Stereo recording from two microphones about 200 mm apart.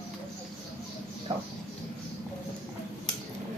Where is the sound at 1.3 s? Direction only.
25° right (ahead or behind).